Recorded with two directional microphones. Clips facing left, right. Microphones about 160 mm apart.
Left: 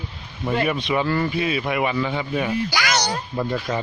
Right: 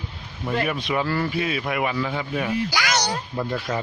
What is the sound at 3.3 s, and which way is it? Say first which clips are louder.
Speech: left 4 dB; centre (ahead or behind).